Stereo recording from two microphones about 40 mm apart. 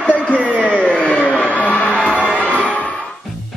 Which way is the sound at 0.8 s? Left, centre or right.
Left.